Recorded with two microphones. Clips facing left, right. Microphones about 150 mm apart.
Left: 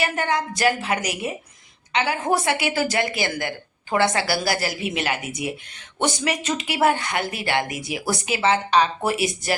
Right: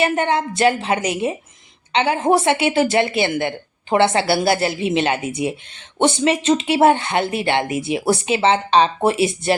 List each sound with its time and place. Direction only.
0.0 s a woman's voice: 25° right (ahead or behind)